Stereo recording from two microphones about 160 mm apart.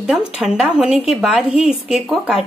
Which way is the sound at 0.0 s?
5° right (ahead or behind).